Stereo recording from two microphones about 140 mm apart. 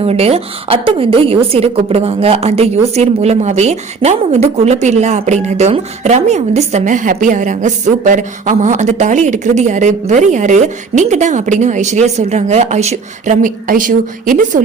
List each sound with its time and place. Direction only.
0.0 s a woman's voice: 45° right (ahead or behind); by 14.6 s 70° right (ahead or behind)